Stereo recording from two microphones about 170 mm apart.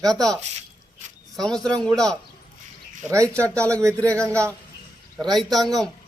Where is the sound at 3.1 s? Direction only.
15° right (ahead or behind).